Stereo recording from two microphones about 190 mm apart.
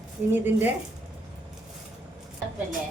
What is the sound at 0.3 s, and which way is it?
Speech, 10° right (ahead or behind).